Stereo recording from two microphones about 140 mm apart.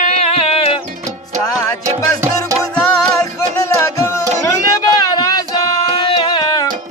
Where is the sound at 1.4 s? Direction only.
25° left (ahead or behind).